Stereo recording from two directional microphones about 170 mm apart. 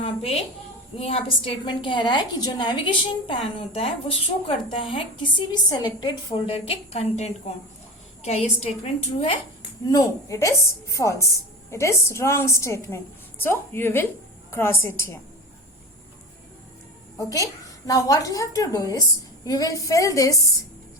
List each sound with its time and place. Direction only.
0.0 s a woman's voice: 35° left (ahead or behind)
9.8 s a woman's voice: 20° left (ahead or behind)
17.2 s a woman's voice: 20° left (ahead or behind)